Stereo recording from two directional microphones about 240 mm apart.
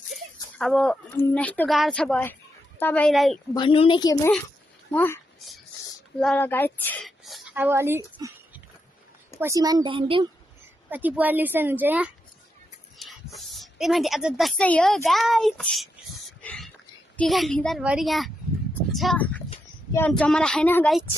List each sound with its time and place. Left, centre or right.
0.1 s speech: centre
3.5 s a woman's voice: left; by 8.3 s centre
9.4 s a woman's voice: centre
10.9 s a woman's voice: centre
13.0 s a sound: centre
17.2 s speech: centre